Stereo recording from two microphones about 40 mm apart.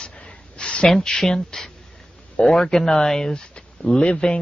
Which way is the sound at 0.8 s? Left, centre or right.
Centre.